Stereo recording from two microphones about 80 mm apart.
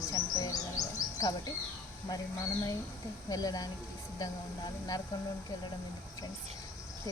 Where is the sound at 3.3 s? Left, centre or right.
Left.